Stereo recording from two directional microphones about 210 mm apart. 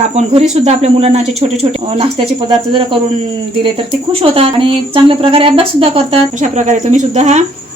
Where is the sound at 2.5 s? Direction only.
25° right (ahead or behind).